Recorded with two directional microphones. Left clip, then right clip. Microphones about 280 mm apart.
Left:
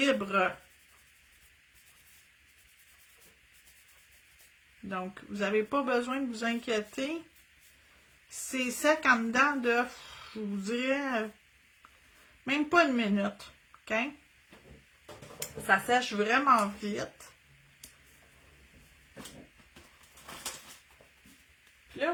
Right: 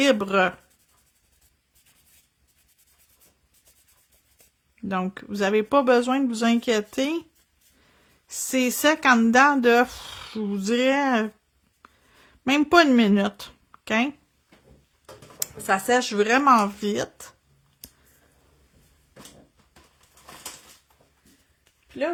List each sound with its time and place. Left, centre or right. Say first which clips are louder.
0.0 s speech: right 7 dB; right
4.9 s speech: right 9 dB; right
8.5 s speech: right 7 dB; right
12.5 s speech: right 8 dB; right
15.4 s speech: right 3 dB; right